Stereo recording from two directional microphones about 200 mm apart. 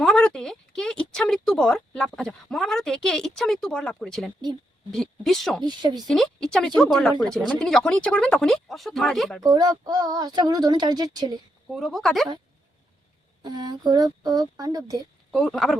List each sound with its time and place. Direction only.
0.0 s a sound: 5° left (ahead or behind)
4.9 s speech: centre (ahead or behind)
5.6 s speech: 20° right (ahead or behind)
6.1 s speech: centre (ahead or behind)
9.4 s speech: 20° right (ahead or behind)
11.7 s speech: centre (ahead or behind)
13.4 s speech: 20° right (ahead or behind)
15.3 s speech: centre (ahead or behind)